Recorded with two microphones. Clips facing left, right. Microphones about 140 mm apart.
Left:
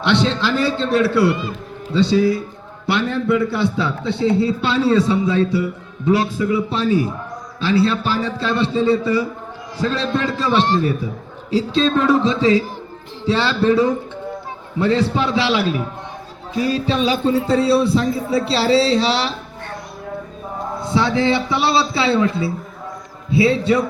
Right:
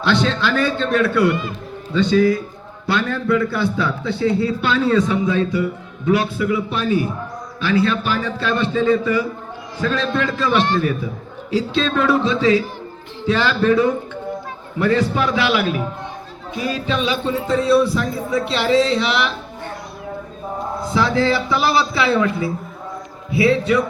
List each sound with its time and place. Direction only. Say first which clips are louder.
0.0 s a man's voice: left 1 dB; 25° left (ahead or behind)
21.2 s a man's voice: even; 20° left (ahead or behind)